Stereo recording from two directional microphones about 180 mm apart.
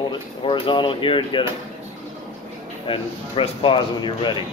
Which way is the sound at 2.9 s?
30° left (ahead or behind).